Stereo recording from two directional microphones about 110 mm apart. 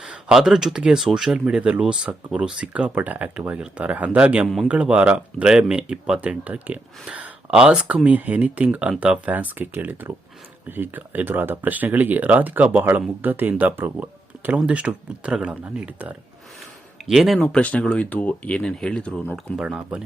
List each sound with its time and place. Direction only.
0.0 s speech: 5° right (ahead or behind)
4.4 s a man's voice: centre (ahead or behind)
4.7 s speech: 10° right (ahead or behind)
17.1 s speech: centre (ahead or behind)
19.5 s speech: 10° right (ahead or behind)